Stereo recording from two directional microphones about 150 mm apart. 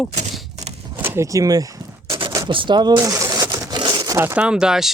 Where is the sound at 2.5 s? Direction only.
35° right (ahead or behind).